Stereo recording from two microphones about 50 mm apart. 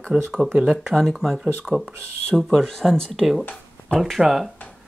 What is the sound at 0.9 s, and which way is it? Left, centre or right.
Speech, centre.